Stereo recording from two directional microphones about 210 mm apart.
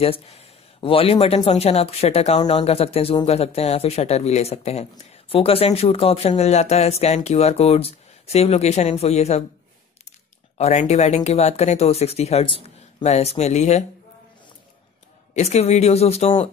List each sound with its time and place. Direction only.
0.0 s speech: 30° left (ahead or behind)
10.6 s speech: 30° left (ahead or behind)
15.3 s speech: 30° left (ahead or behind)